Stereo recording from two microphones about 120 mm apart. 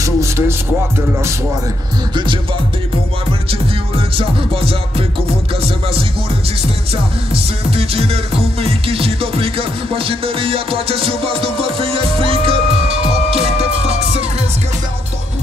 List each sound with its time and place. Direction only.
0.0 s a sound: 25° right (ahead or behind)
4.2 s music: 50° right (ahead or behind)
7.7 s music: 55° right (ahead or behind)